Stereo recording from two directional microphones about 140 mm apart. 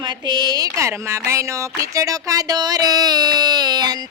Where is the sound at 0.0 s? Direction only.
30° right (ahead or behind).